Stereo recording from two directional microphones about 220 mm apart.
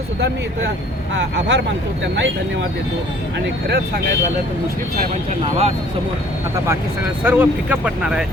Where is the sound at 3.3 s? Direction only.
50° right (ahead or behind).